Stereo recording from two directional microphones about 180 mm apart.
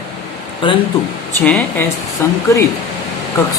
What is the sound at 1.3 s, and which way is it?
Speech, 10° left (ahead or behind).